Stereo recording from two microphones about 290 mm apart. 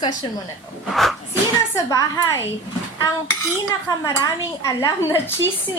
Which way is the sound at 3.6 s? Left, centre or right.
Centre.